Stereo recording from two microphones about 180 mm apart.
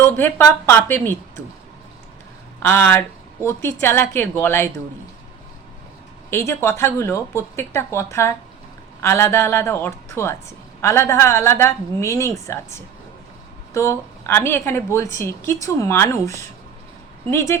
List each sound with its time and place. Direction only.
0.0 s a woman's voice: 15° left (ahead or behind)
2.6 s a woman's voice: 10° left (ahead or behind)
6.3 s a woman's voice: 15° left (ahead or behind)
17.3 s a woman's voice: 15° left (ahead or behind)